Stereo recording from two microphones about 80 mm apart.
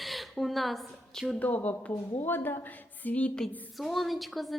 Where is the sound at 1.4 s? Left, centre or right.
Centre.